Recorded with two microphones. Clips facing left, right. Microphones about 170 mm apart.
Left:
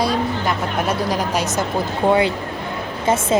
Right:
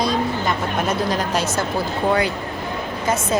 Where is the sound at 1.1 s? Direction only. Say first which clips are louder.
Left 1 dB; 10° left (ahead or behind).